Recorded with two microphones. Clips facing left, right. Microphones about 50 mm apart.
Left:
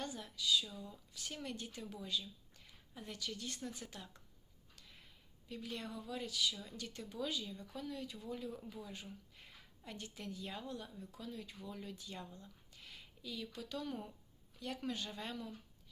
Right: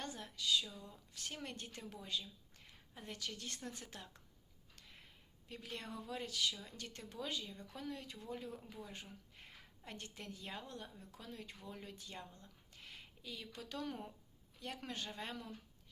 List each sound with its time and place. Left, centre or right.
0.0 s a woman's voice: right
3.8 s speech: right
5.5 s a woman's voice: right